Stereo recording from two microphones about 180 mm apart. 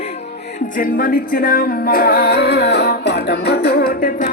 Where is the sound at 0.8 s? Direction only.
50° left (ahead or behind).